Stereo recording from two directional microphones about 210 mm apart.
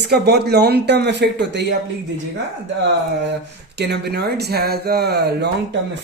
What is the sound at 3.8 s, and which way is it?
Speech, 50° right (ahead or behind).